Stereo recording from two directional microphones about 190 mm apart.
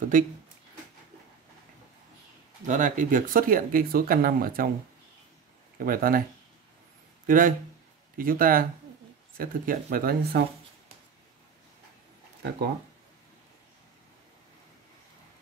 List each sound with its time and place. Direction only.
0.1 s speech: 45° right (ahead or behind)
2.6 s speech: 40° right (ahead or behind)
5.8 s speech: 50° right (ahead or behind)
7.2 s speech: 45° right (ahead or behind)